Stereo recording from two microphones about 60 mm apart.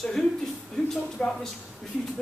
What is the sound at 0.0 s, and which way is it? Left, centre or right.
Speech, centre.